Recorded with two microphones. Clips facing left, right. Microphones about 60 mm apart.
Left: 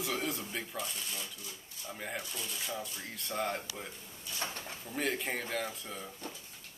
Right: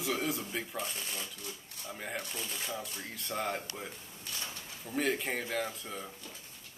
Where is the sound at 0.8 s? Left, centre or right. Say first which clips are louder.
Right 1 dB; right.